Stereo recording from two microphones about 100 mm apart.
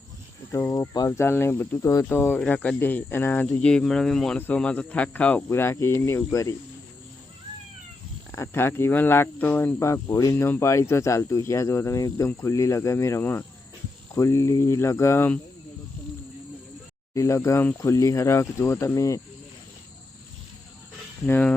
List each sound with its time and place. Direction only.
0.5 s cricket: 30° left (ahead or behind)
1.0 s speech: 25° left (ahead or behind)
2.0 s speech: 20° left (ahead or behind)
3.6 s speech: 10° left (ahead or behind); by 6.6 s 30° left (ahead or behind)
8.3 s speech: 25° left (ahead or behind)
17.2 s speech: 30° left (ahead or behind)
17.7 s cricket: 30° left (ahead or behind)
21.2 s speech: 15° left (ahead or behind)